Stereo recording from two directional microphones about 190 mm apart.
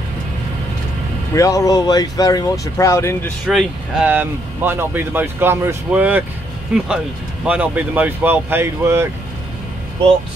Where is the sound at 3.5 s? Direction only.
5° right (ahead or behind).